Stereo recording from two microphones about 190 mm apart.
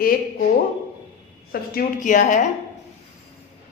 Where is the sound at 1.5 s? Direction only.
45° left (ahead or behind).